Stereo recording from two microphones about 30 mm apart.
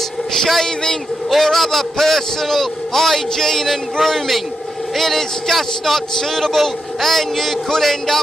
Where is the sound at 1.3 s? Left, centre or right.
Centre.